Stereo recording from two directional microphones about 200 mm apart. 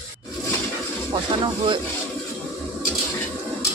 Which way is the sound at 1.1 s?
25° right (ahead or behind).